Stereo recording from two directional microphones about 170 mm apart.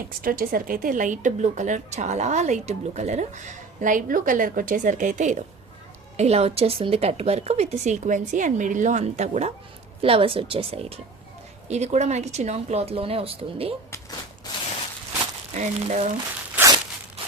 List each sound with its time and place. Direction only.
0.1 s a woman's voice: 60° right (ahead or behind); by 13.7 s 35° right (ahead or behind)
15.5 s speech: 45° right (ahead or behind)
16.6 s crunch: 20° right (ahead or behind)